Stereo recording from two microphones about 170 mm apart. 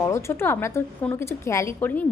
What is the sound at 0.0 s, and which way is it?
A woman's voice, 15° left (ahead or behind).